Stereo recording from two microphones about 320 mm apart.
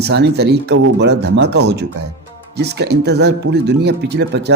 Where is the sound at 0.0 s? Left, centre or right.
Right.